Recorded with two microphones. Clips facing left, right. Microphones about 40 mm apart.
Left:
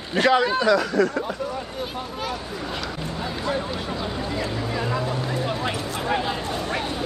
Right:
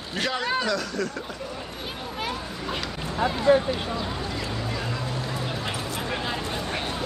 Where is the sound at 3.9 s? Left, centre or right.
Centre.